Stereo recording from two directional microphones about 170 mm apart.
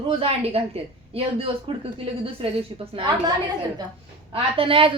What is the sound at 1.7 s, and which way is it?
A woman's voice, 30° right (ahead or behind).